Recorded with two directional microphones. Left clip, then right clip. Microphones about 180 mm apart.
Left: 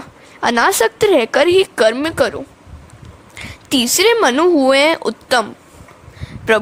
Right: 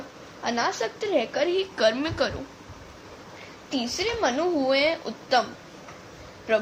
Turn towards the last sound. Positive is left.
turn(degrees=55)  # may be behind; listen again after turning